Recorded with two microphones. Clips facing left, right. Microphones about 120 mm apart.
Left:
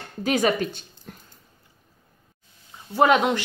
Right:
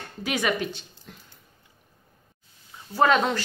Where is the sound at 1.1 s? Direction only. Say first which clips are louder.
Left 5 dB; 50° left (ahead or behind).